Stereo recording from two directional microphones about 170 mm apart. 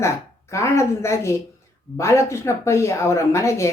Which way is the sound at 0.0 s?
15° left (ahead or behind).